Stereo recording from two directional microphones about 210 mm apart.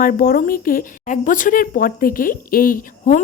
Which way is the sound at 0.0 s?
40° left (ahead or behind).